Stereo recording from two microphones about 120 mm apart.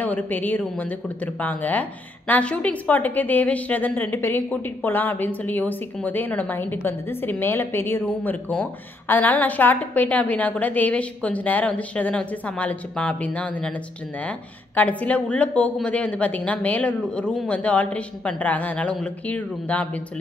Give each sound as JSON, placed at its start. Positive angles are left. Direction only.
{"t": 0.0, "sound": "a woman's voice", "side_deg": 15}
{"t": 14.8, "sound": "a woman's voice", "side_deg": 10}